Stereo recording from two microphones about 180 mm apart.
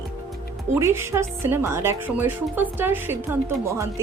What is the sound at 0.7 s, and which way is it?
A woman's voice, 15° right (ahead or behind).